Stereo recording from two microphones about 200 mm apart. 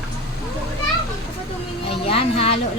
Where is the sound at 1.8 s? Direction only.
30° left (ahead or behind).